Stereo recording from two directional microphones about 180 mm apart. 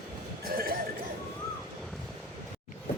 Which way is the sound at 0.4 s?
55° right (ahead or behind).